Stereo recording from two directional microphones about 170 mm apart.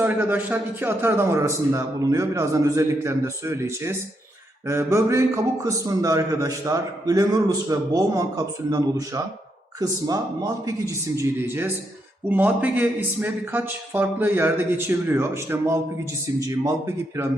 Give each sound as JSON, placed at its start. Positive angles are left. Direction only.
{"t": 0.0, "sound": "a man's voice", "side_deg": -10}